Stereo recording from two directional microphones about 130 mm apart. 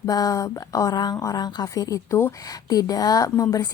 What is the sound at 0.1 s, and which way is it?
A woman's voice, 30° left (ahead or behind).